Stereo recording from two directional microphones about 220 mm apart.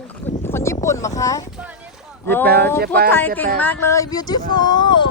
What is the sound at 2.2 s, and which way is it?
Speech, 10° left (ahead or behind).